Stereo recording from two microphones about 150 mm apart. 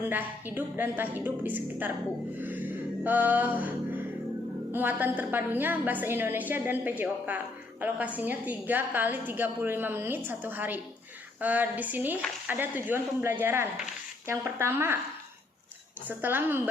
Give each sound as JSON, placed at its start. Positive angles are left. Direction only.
{"t": 0.0, "sound": "a woman's voice", "side_deg": -10}
{"t": 2.4, "sound": "music", "side_deg": -10}
{"t": 4.7, "sound": "a woman's voice", "side_deg": -10}
{"t": 16.0, "sound": "a woman's voice", "side_deg": -15}